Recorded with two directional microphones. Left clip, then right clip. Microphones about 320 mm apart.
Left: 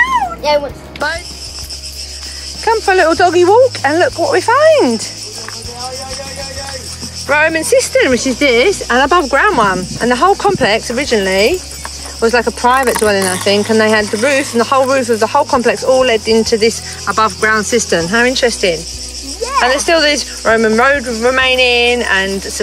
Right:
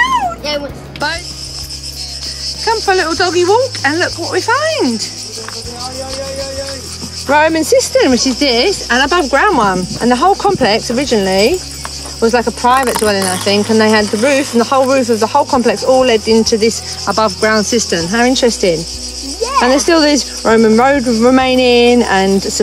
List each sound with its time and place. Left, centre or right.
2.6 s speech: centre
7.2 s speech: centre